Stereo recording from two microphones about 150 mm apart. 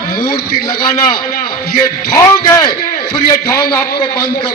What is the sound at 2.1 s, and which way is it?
A man's voice, 25° left (ahead or behind).